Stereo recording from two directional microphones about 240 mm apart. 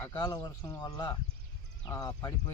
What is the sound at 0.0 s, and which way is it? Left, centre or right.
Speech, centre.